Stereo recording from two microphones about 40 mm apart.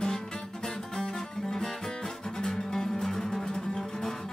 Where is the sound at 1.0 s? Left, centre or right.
Centre.